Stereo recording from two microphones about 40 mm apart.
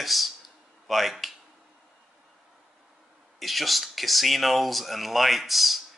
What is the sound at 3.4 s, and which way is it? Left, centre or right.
Speech, centre.